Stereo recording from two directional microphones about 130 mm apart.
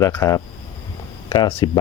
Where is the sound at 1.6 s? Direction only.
35° left (ahead or behind).